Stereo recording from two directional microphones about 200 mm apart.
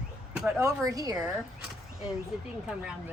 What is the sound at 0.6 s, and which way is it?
Speech, 15° right (ahead or behind).